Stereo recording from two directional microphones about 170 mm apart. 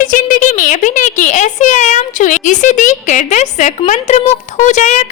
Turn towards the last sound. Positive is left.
turn(degrees=45)  # may be behind; listen again after turning